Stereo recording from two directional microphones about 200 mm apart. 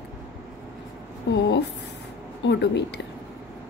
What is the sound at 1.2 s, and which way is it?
Speech, 60° left (ahead or behind).